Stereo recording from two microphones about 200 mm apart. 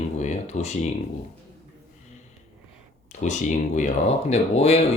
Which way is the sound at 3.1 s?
35° left (ahead or behind).